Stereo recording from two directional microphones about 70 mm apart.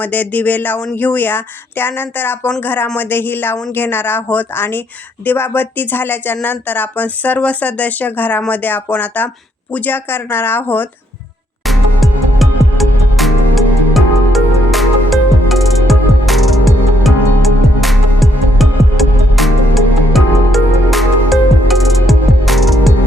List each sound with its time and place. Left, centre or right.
0.0 s speech: left
11.6 s music: centre